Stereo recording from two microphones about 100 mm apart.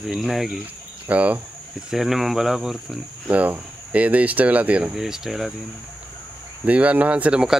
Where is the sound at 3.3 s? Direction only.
15° right (ahead or behind).